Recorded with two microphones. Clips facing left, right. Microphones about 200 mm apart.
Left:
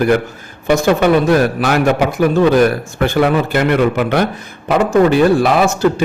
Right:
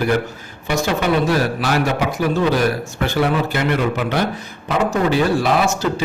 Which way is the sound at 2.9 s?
55° left (ahead or behind).